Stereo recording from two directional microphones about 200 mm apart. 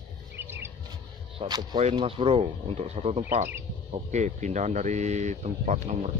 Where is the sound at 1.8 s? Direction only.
30° right (ahead or behind).